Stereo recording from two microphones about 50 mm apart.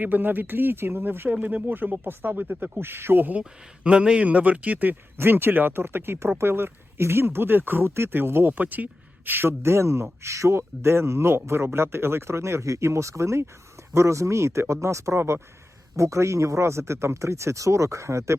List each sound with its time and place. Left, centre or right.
0.0 s speech: right
1.4 s speech: right
2.7 s speech: right
3.8 s speech: right
5.1 s speech: right
7.9 s speech: right
8.1 s speech: right
8.5 s speech: right
10.8 s speech: right